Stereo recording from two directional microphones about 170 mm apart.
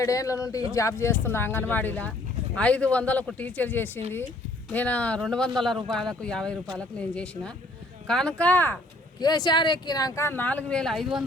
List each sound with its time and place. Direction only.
0.0 s speech: 20° left (ahead or behind)
9.2 s speech: 25° left (ahead or behind); by 11.2 s centre (ahead or behind)